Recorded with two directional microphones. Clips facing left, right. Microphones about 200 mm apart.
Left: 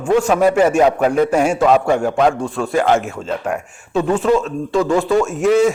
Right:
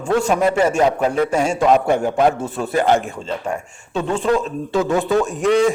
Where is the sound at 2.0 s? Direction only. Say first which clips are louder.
Left 1 dB; 20° right (ahead or behind).